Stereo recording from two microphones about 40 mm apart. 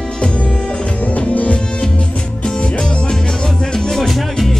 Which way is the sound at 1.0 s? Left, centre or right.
Left.